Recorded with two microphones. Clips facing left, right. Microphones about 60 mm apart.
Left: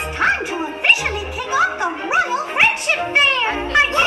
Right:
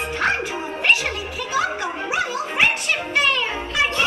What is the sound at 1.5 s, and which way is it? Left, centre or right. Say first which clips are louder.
Music: left 5 dB; left.